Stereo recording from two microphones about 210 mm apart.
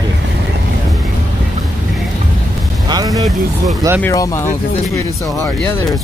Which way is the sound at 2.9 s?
15° right (ahead or behind).